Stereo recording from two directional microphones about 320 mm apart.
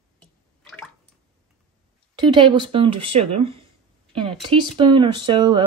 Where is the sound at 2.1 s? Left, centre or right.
Centre.